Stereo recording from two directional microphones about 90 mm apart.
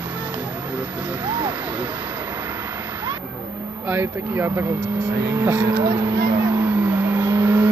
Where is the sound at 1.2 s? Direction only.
60° right (ahead or behind).